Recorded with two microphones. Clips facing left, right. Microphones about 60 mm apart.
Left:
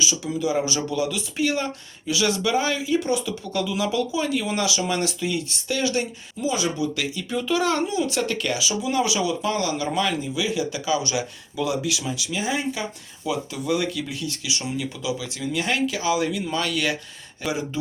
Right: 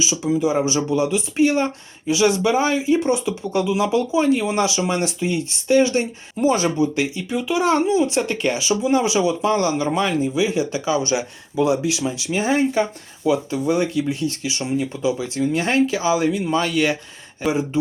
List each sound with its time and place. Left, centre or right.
0.0 s speech: right
6.3 s speech: right